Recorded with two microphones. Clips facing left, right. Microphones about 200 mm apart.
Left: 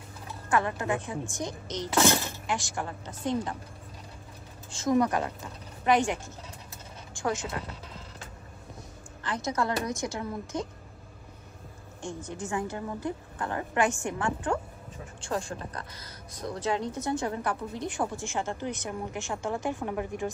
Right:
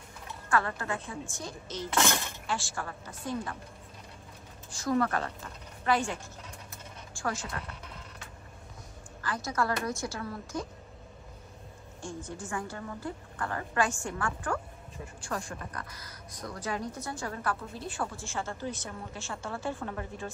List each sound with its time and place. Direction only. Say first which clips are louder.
0.5 s a woman's voice: left 3 dB; 20° left (ahead or behind)
4.7 s a woman's voice: left 4 dB; 20° left (ahead or behind)
7.2 s speech: left 4 dB; 20° left (ahead or behind)
9.2 s speech: left 2 dB; 20° left (ahead or behind)
12.0 s speech: left 3 dB; 20° left (ahead or behind)